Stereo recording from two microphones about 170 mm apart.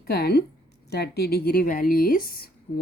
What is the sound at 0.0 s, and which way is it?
A woman's voice, 70° left (ahead or behind).